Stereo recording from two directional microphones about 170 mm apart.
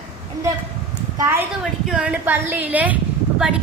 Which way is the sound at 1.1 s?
15° right (ahead or behind).